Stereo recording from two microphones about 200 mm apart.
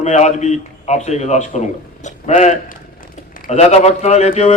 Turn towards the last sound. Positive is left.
turn(degrees=30)  # may be behind; listen again after turning